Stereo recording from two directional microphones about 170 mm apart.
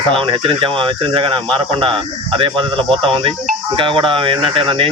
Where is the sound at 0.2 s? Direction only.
30° right (ahead or behind).